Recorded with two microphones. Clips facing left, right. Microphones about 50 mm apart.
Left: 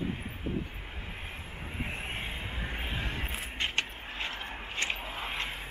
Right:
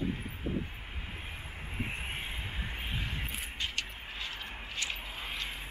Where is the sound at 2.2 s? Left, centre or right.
Centre.